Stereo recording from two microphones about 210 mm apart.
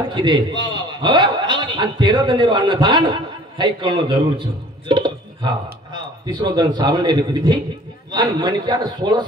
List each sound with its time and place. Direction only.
0.1 s a man's voice: 20° right (ahead or behind)
4.8 s a sound: 20° right (ahead or behind)
6.2 s a man's voice: 20° right (ahead or behind)